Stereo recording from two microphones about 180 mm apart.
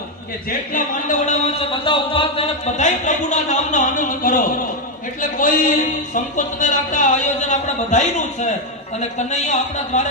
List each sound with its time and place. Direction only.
0.7 s speech: 45° left (ahead or behind)
1.8 s speech: 30° left (ahead or behind)